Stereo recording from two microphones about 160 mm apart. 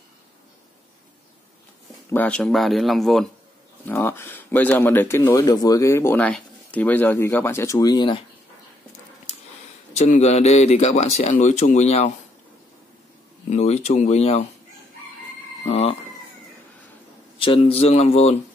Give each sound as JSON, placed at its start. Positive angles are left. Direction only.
{"t": 2.0, "sound": "speech", "side_deg": 10}
{"t": 3.8, "sound": "speech", "side_deg": 15}
{"t": 9.9, "sound": "speech", "side_deg": 45}
{"t": 13.5, "sound": "speech", "side_deg": 45}
{"t": 15.7, "sound": "a man's voice", "side_deg": 40}
{"t": 17.4, "sound": "a man's voice", "side_deg": 35}